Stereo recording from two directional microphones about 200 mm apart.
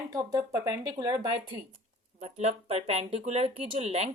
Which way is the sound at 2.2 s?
35° right (ahead or behind).